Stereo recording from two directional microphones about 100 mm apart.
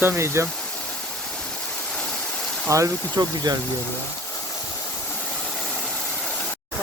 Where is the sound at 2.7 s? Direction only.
30° right (ahead or behind).